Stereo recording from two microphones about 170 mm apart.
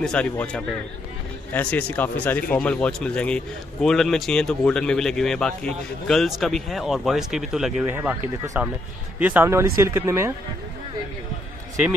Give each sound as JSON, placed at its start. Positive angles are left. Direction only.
{"t": 0.0, "sound": "a man's voice", "side_deg": 5}